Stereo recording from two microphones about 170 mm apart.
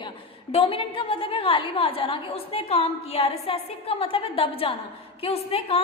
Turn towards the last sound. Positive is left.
turn(degrees=35)  # may be behind; listen again after turning